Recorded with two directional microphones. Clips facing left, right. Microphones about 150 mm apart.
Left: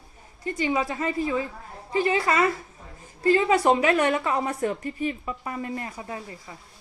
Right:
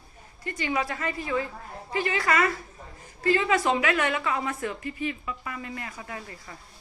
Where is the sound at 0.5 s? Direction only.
25° left (ahead or behind).